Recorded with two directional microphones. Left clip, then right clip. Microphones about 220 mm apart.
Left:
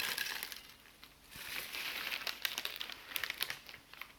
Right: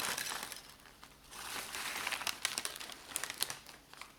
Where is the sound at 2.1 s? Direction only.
35° right (ahead or behind).